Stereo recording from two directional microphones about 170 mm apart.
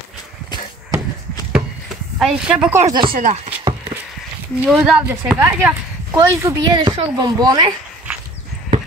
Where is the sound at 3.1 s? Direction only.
45° right (ahead or behind).